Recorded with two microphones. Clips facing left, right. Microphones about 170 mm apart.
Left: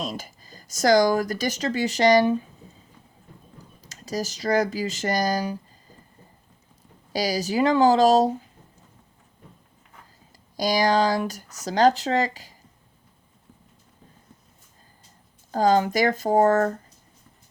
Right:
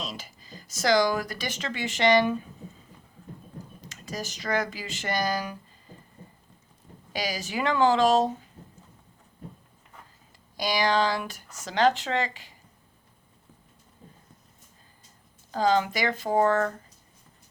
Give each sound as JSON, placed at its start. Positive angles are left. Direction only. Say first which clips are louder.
{"t": 0.0, "sound": "speech", "louder": "left 6 dB", "side_deg": 50}
{"t": 3.8, "sound": "speech", "louder": "left 7 dB", "side_deg": 35}
{"t": 7.1, "sound": "speech", "louder": "left 7 dB", "side_deg": 40}
{"t": 10.6, "sound": "speech", "louder": "left 4 dB", "side_deg": 40}
{"t": 15.5, "sound": "speech", "louder": "left 4 dB", "side_deg": 45}